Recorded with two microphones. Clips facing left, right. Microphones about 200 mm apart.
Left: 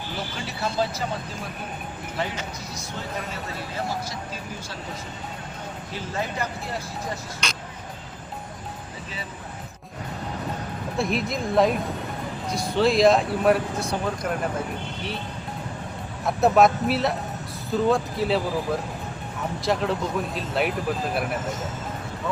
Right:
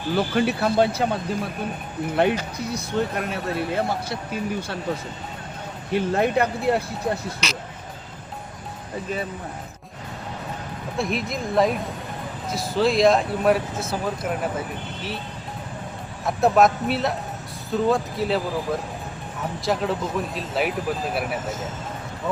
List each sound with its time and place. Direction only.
0.2 s speech: 60° right (ahead or behind)
2.2 s speech: 60° right (ahead or behind)
5.9 s speech: 60° right (ahead or behind)
10.9 s speech: centre (ahead or behind)
16.2 s speech: centre (ahead or behind)